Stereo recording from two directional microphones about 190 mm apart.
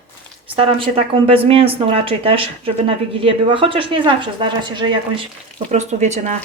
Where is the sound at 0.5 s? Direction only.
30° right (ahead or behind).